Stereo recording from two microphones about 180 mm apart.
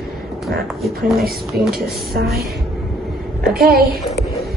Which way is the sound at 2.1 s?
60° right (ahead or behind).